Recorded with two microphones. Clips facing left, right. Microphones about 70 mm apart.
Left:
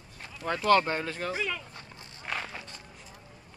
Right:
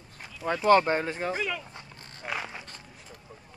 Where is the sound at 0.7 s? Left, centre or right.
Right.